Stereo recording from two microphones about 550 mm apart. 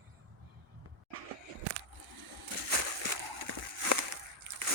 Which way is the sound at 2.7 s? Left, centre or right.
Right.